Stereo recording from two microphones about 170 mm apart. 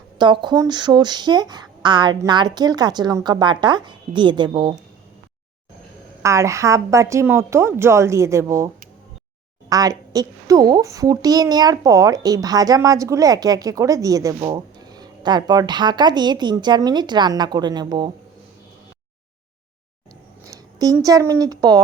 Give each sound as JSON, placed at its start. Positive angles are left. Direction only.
{"t": 0.2, "sound": "speech", "side_deg": -25}
{"t": 6.2, "sound": "a woman's voice", "side_deg": -15}
{"t": 20.4, "sound": "a sound", "side_deg": -20}
{"t": 21.0, "sound": "speech", "side_deg": -20}